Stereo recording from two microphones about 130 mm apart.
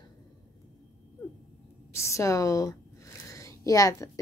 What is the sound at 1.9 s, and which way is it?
A woman's voice, 20° left (ahead or behind).